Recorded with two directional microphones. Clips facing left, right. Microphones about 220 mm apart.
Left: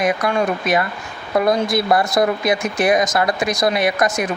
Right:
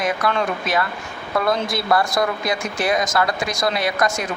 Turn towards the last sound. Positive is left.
turn(degrees=20)  # may be behind; listen again after turning